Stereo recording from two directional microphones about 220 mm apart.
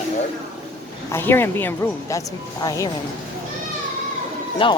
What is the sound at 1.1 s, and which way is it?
Speech, 10° left (ahead or behind).